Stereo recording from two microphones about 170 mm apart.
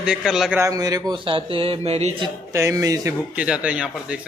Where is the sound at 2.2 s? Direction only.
15° right (ahead or behind).